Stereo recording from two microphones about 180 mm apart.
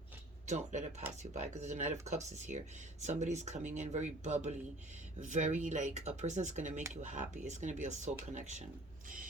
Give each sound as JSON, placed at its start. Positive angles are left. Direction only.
{"t": 0.4, "sound": "speech", "side_deg": -40}